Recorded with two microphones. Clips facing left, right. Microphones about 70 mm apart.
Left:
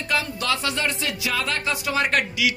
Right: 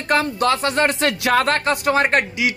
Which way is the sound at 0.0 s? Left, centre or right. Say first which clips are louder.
Right 7 dB; right.